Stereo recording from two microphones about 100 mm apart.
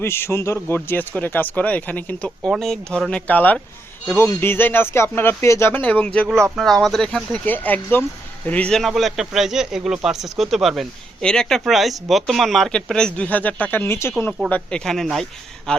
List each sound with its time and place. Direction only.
0.0 s speech: 25° left (ahead or behind)
2.6 s speech: 5° left (ahead or behind)
6.6 s speech: 5° left (ahead or behind)
7.4 s speech: 20° left (ahead or behind)
8.8 s speech: centre (ahead or behind); by 14.1 s 25° left (ahead or behind)
14.5 s speech: 5° left (ahead or behind)